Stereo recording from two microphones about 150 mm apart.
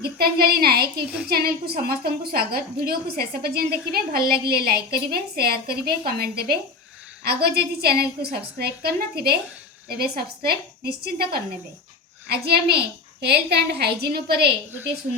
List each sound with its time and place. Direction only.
0.0 s a woman's voice: 85° right